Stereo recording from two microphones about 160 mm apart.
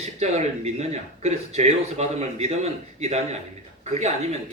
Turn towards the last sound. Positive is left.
turn(degrees=-45)  # may be behind; listen again after turning